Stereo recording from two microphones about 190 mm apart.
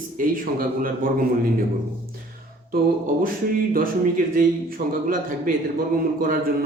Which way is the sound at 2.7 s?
50° right (ahead or behind).